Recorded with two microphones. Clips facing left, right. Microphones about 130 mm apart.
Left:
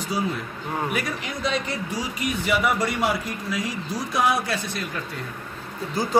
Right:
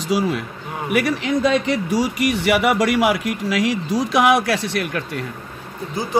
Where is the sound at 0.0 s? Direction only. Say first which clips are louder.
Right 6 dB; 90° right; by 5.2 s 70° right (ahead or behind).